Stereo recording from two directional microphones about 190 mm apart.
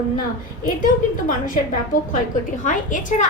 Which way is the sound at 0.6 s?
45° left (ahead or behind).